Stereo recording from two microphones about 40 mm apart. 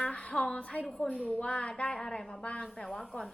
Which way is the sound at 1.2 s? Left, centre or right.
Centre.